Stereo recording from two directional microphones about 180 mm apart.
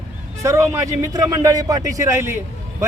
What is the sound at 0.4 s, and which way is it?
Speech, 15° right (ahead or behind).